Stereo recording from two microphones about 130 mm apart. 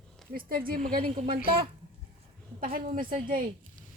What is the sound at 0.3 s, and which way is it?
Speech, 90° right.